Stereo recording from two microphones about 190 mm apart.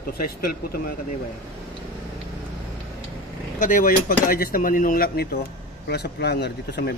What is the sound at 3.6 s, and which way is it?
Speech, 45° left (ahead or behind).